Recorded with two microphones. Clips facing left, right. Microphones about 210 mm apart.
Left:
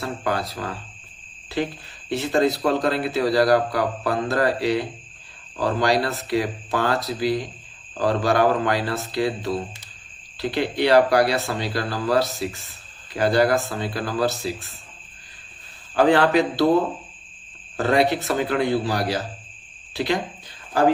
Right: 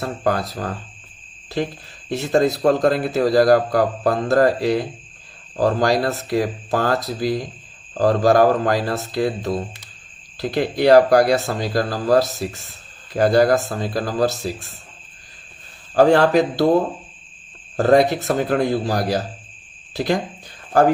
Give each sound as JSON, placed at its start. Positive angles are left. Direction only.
{"t": 0.0, "sound": "a man's voice", "side_deg": -45}
{"t": 2.0, "sound": "a man's voice", "side_deg": -45}
{"t": 16.0, "sound": "speech", "side_deg": -40}